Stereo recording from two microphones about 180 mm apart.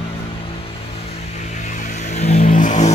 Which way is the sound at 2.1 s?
40° left (ahead or behind).